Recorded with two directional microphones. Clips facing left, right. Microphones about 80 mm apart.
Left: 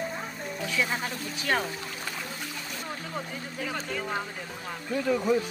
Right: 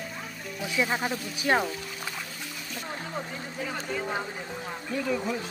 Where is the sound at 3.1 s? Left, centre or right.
Centre.